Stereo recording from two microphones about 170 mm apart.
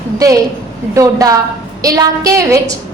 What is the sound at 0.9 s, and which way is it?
A woman's voice, 20° right (ahead or behind).